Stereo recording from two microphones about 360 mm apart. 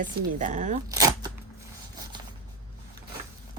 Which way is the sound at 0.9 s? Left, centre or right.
Centre.